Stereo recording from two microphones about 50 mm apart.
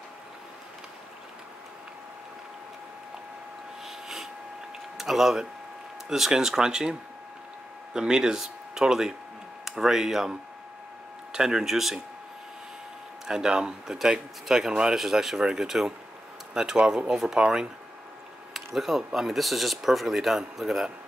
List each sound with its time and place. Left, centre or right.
3.8 s a sound: centre
4.9 s speech: centre
11.3 s speech: centre
13.3 s speech: centre